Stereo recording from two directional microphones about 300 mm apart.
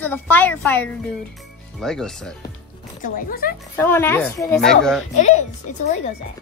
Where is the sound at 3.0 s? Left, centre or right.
Left.